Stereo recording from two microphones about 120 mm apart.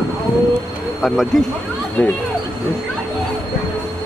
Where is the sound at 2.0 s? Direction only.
15° left (ahead or behind).